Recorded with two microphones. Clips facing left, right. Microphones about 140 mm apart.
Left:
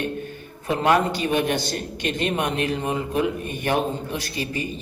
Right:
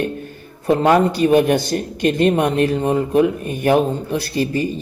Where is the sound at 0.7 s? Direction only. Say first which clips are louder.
Right 6 dB; 40° right (ahead or behind).